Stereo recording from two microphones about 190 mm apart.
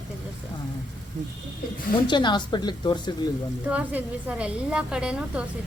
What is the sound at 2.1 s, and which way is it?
A woman's voice, 25° left (ahead or behind).